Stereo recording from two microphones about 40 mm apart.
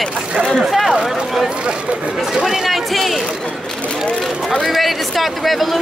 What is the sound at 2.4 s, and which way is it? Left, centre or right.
Speech, centre.